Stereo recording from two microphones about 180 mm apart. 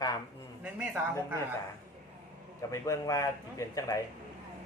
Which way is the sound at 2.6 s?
20° left (ahead or behind).